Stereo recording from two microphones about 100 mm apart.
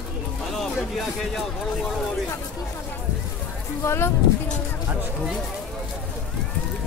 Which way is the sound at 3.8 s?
25° left (ahead or behind).